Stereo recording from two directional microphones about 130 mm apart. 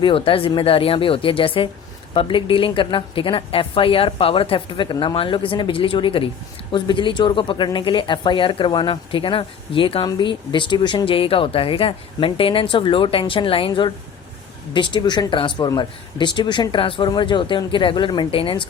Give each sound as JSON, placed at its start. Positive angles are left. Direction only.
{"t": 0.0, "sound": "a woman's voice", "side_deg": 45}